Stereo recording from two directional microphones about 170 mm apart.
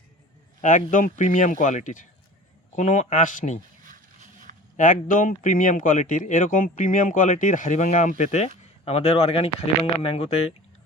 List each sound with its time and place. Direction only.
0.9 s speech: 50° left (ahead or behind)
3.8 s a sound: 50° right (ahead or behind)
4.8 s speech: 55° left (ahead or behind); by 10.5 s 35° left (ahead or behind)